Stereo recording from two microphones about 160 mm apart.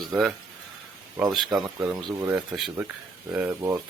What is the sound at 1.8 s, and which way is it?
Speech, 15° right (ahead or behind).